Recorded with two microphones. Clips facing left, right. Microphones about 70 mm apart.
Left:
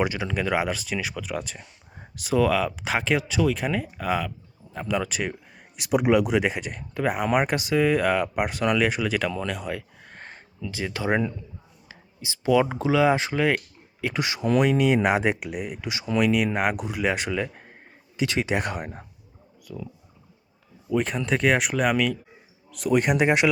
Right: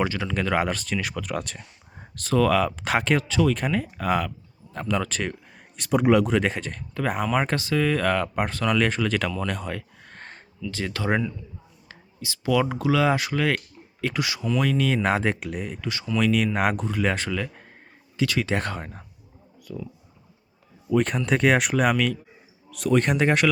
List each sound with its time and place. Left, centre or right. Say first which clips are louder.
0.0 s speech: even; centre
9.5 s a sound: even; centre
10.7 s speech: even; centre
19.6 s speech: right 2 dB; centre
20.9 s speech: right 2 dB; centre